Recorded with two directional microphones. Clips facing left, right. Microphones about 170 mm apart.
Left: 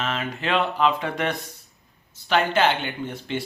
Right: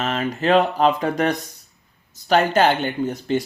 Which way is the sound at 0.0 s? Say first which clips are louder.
Right 6 dB; 40° right (ahead or behind).